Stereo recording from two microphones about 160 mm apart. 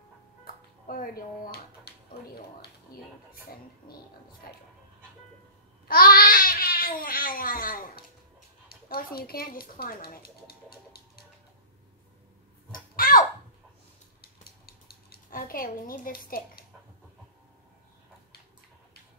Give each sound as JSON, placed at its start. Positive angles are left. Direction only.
{"t": 0.8, "sound": "speech", "side_deg": 65}
{"t": 4.4, "sound": "speech", "side_deg": 70}
{"t": 5.9, "sound": "babbling", "side_deg": 65}
{"t": 8.6, "sound": "speech", "side_deg": 70}
{"t": 12.9, "sound": "a sound", "side_deg": 60}
{"t": 14.7, "sound": "speech", "side_deg": 75}